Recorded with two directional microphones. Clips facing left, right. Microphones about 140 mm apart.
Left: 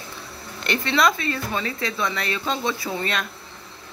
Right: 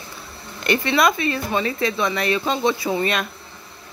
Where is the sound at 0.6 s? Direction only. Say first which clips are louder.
Right 3 dB; 10° right (ahead or behind).